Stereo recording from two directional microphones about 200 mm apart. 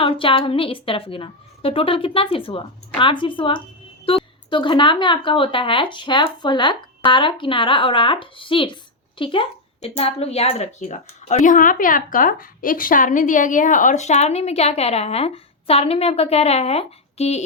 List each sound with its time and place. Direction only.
0.0 s a woman's voice: 25° left (ahead or behind)